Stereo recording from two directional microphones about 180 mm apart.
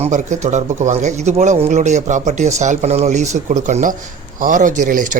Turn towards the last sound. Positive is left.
turn(degrees=-45)  # may be behind; listen again after turning